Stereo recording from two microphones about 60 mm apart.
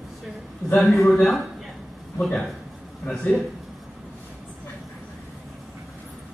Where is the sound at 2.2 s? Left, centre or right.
Centre.